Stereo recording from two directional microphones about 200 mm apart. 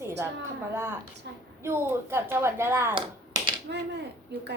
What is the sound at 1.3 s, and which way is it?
Speech, 60° right (ahead or behind).